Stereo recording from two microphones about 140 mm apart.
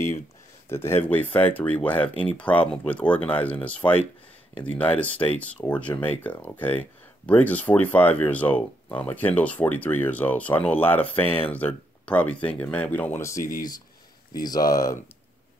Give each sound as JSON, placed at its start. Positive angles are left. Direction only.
{"t": 0.7, "sound": "speech", "side_deg": 15}
{"t": 5.0, "sound": "speech", "side_deg": 10}
{"t": 13.4, "sound": "speech", "side_deg": 80}
{"t": 14.3, "sound": "speech", "side_deg": 25}